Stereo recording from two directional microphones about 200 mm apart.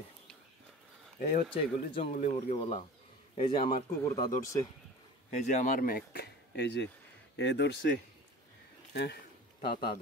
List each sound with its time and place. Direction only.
1.3 s a man's voice: 30° left (ahead or behind)
4.0 s speech: 15° left (ahead or behind)
5.5 s speech: 40° left (ahead or behind); by 7.9 s 60° left (ahead or behind)
8.9 s speech: 55° left (ahead or behind)
9.6 s speech: 25° left (ahead or behind)